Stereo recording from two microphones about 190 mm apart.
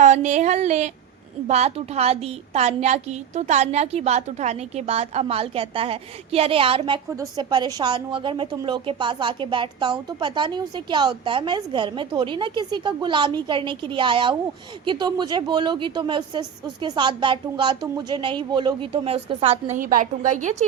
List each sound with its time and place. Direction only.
0.0 s a woman's voice: 40° right (ahead or behind)